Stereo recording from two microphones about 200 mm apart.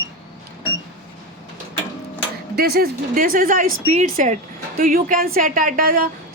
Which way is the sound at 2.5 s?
50° right (ahead or behind).